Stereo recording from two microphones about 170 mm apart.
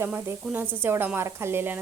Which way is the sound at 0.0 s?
10° right (ahead or behind).